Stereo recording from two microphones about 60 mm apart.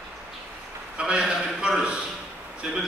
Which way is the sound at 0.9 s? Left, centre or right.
Centre.